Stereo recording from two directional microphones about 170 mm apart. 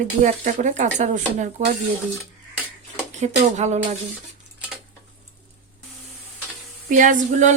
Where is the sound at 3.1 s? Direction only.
45° right (ahead or behind).